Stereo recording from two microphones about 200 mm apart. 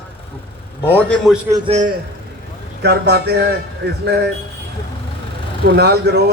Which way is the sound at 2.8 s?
55° right (ahead or behind).